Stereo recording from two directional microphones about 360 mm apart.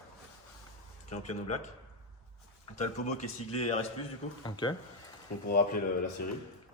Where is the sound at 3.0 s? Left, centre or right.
Centre.